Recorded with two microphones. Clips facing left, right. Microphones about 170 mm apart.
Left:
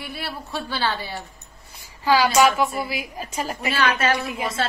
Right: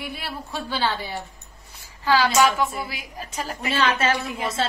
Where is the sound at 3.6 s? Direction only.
25° right (ahead or behind).